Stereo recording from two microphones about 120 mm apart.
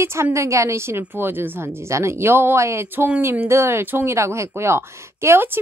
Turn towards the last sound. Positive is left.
turn(degrees=-20)  # may be behind; listen again after turning